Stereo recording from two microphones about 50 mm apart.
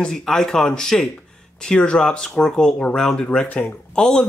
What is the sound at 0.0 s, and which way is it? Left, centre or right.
Speech, centre.